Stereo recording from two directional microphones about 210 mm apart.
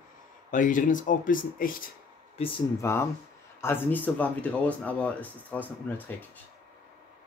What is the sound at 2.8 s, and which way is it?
Speech, 10° left (ahead or behind).